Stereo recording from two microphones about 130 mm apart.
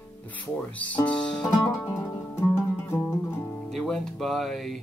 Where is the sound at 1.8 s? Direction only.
20° left (ahead or behind).